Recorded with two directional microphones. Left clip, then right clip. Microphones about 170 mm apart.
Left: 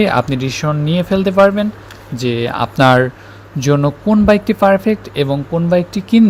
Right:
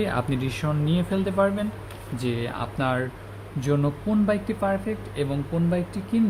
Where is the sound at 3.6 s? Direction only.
35° left (ahead or behind).